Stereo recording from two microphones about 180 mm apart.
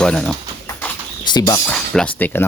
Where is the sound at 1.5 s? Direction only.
5° left (ahead or behind).